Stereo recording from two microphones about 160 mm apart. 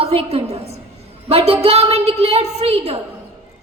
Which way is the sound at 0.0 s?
40° right (ahead or behind).